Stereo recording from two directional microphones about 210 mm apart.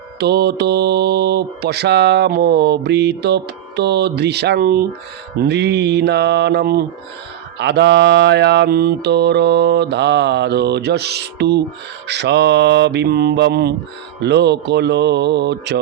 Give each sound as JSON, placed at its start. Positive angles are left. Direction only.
{"t": 0.2, "sound": "mantra", "side_deg": -50}